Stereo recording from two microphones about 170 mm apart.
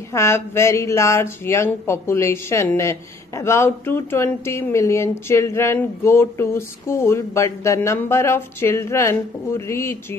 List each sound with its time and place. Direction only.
0.1 s speech: 15° left (ahead or behind)